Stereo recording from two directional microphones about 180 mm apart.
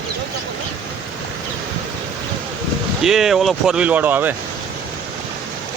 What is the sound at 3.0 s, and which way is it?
Speech, centre (ahead or behind).